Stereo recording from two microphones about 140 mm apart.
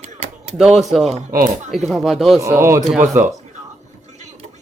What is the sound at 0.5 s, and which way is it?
Speech, 5° right (ahead or behind).